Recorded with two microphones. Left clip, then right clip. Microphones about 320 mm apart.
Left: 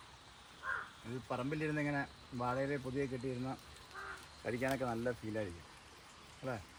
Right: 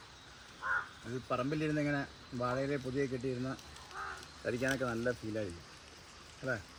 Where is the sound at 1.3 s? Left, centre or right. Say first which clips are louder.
Right 4 dB; centre.